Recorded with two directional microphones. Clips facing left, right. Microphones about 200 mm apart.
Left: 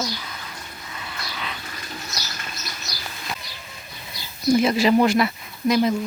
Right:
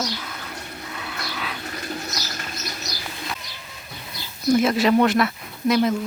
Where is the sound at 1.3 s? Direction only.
Centre (ahead or behind).